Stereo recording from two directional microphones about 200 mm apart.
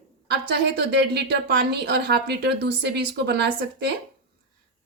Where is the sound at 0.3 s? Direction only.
55° right (ahead or behind).